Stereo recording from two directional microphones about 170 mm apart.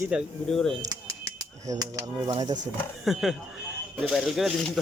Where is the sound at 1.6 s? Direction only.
20° right (ahead or behind).